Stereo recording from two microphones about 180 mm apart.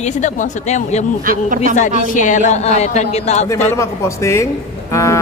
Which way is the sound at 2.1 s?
45° left (ahead or behind).